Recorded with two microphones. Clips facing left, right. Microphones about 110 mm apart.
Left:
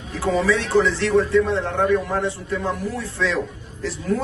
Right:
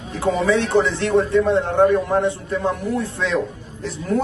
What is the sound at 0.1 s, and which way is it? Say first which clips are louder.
Speech: right 2 dB; 25° right (ahead or behind).